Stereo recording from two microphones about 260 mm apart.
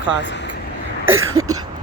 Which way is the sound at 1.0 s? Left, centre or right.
Right.